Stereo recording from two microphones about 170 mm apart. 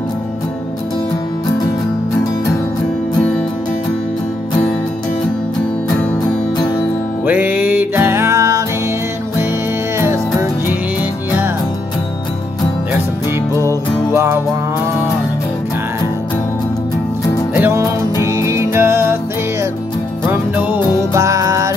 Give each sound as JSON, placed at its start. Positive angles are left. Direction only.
{"t": 7.2, "sound": "music", "side_deg": -10}
{"t": 9.9, "sound": "music", "side_deg": -15}
{"t": 14.1, "sound": "music", "side_deg": -15}
{"t": 17.6, "sound": "music", "side_deg": -15}
{"t": 20.2, "sound": "music", "side_deg": -10}